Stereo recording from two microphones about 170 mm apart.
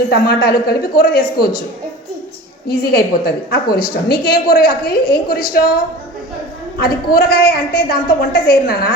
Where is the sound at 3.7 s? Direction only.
65° left (ahead or behind).